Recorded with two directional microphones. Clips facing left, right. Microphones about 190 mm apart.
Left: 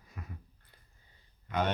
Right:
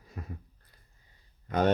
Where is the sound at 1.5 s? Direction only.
40° right (ahead or behind).